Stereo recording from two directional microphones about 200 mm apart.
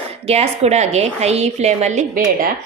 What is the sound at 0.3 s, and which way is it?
A woman's voice, 30° right (ahead or behind).